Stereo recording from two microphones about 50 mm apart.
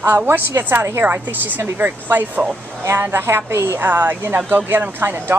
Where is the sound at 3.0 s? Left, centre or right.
Right.